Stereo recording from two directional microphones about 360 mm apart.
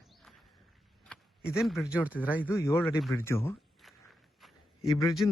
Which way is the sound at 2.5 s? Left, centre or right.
Centre.